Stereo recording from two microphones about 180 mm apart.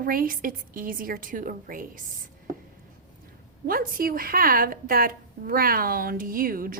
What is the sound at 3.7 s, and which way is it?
A woman's voice, 55° right (ahead or behind).